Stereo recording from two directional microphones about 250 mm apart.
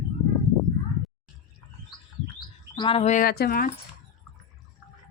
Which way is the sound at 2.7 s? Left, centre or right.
Left.